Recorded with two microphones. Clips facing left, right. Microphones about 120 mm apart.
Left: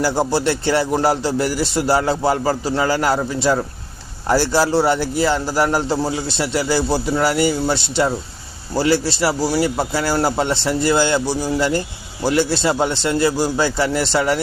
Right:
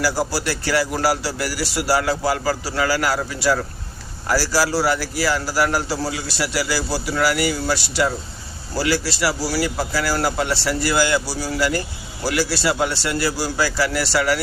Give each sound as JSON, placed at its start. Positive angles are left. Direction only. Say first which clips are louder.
{"t": 0.0, "sound": "a man's voice", "louder": "left 4 dB", "side_deg": 25}